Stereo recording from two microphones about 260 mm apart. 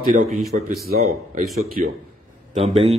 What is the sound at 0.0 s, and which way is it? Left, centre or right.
A man's voice, right.